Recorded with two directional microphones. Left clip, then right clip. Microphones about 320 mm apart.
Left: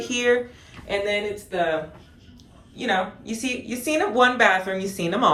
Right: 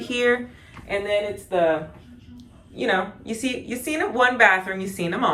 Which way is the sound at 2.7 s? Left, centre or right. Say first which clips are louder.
Right 1 dB; centre.